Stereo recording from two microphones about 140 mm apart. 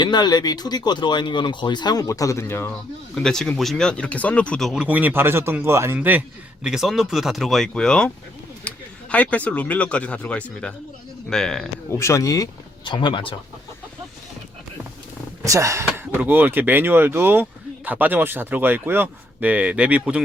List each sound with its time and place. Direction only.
0.0 s speech: 30° left (ahead or behind); by 2.7 s 15° left (ahead or behind)
3.2 s speech: 5° left (ahead or behind)
11.9 s speech: 20° left (ahead or behind)
12.8 s speech: 35° left (ahead or behind)
15.4 s speech: 20° right (ahead or behind)